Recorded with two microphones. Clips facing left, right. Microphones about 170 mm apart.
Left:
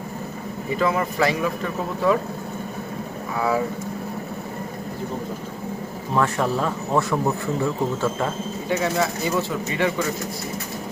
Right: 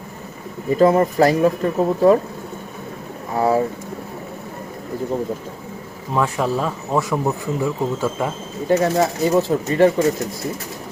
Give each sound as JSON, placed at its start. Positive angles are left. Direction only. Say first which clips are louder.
{"t": 0.8, "sound": "speech", "louder": "right 8 dB", "side_deg": -40}
{"t": 3.3, "sound": "speech", "louder": "right 5 dB", "side_deg": -35}
{"t": 6.1, "sound": "speech", "louder": "right 2 dB", "side_deg": -10}
{"t": 8.7, "sound": "speech", "louder": "right 6 dB", "side_deg": -40}